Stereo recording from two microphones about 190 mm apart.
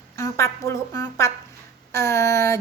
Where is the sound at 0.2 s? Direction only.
15° left (ahead or behind).